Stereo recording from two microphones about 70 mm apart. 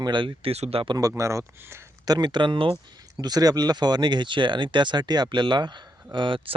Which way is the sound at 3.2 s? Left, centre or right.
Right.